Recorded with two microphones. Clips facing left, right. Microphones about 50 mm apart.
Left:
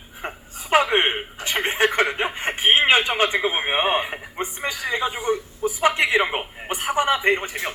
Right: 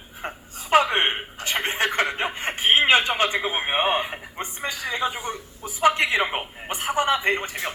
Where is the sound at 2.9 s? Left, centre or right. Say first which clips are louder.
Left 1 dB; left.